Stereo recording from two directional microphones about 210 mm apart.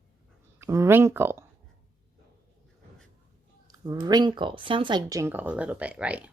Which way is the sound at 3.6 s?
15° right (ahead or behind).